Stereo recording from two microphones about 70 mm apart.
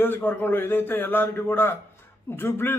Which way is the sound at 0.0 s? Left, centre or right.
Left.